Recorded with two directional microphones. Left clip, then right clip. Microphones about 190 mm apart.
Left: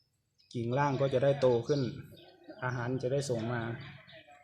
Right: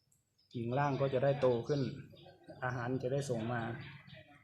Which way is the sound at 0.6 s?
45° left (ahead or behind).